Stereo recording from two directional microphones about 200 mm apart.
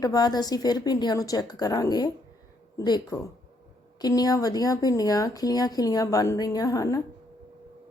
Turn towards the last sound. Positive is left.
turn(degrees=15)  # may be behind; listen again after turning